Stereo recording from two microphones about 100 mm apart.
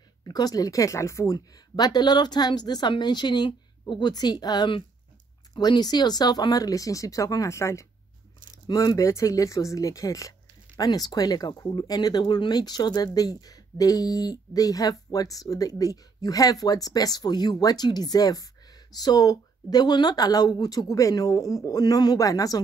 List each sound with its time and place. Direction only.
0.2 s speech: 40° left (ahead or behind)
1.8 s a woman's voice: 45° left (ahead or behind)